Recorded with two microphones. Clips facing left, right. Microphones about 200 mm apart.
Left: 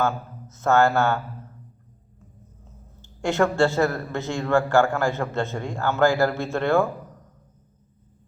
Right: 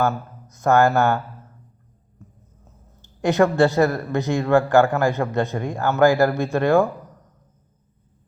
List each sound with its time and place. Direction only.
0.5 s speech: 15° right (ahead or behind)
3.2 s speech: 15° right (ahead or behind)